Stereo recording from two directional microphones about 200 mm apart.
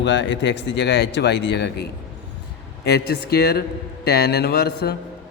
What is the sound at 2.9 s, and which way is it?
Speech, 55° left (ahead or behind).